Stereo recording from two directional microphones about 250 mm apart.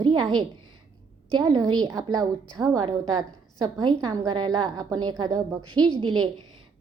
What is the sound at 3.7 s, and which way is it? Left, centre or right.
A woman's voice, centre.